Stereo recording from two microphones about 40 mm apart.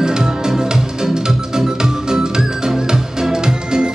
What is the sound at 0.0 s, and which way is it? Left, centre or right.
Music, centre.